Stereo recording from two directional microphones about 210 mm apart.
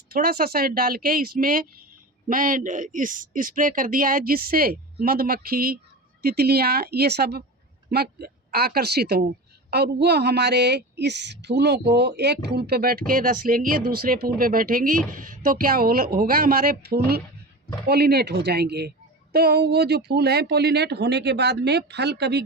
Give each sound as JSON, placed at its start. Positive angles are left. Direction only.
{"t": 0.1, "sound": "speech", "side_deg": -45}